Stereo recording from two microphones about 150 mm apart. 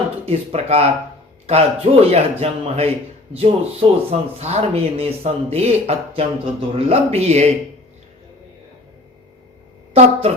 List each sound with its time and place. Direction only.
0.3 s speech: 45° right (ahead or behind)
9.9 s a woman's voice: 45° right (ahead or behind)